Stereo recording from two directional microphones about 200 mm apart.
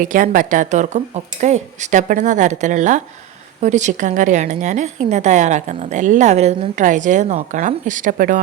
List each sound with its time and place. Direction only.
0.0 s a woman's voice: 40° right (ahead or behind)